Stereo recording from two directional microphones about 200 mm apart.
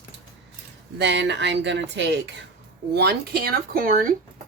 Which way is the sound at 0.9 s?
60° right (ahead or behind).